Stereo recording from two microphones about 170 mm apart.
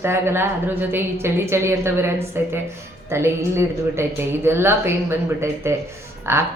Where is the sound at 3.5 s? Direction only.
15° right (ahead or behind).